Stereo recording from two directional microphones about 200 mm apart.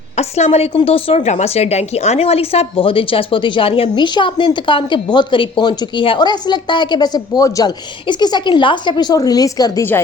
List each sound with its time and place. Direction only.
0.2 s a woman's voice: 35° left (ahead or behind); by 10.0 s 15° left (ahead or behind)